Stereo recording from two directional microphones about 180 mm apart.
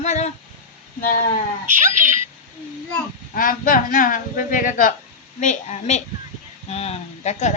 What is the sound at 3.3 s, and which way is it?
Speech, 50° left (ahead or behind).